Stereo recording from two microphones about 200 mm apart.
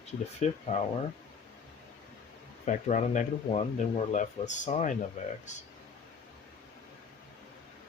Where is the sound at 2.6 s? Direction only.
35° left (ahead or behind).